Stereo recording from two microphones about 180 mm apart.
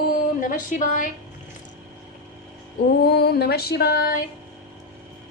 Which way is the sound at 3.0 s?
60° left (ahead or behind).